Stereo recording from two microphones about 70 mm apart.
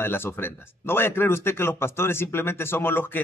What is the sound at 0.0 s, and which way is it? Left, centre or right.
Speech, left.